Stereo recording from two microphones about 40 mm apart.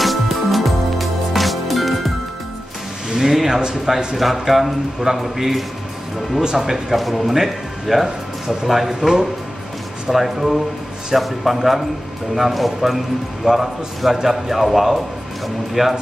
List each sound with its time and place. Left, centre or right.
0.0 s music: centre
3.1 s a sound: centre
4.2 s a man's voice: centre
9.0 s speech: centre
10.0 s a man's voice: centre